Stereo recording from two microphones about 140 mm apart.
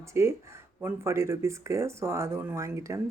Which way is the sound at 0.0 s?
20° right (ahead or behind).